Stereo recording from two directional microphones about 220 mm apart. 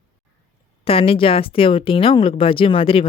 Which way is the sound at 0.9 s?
25° left (ahead or behind).